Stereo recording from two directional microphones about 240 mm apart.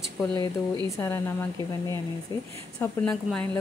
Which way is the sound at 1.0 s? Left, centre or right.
Centre.